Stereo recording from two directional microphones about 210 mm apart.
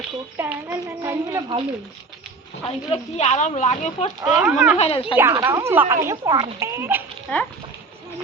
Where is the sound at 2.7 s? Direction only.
30° left (ahead or behind).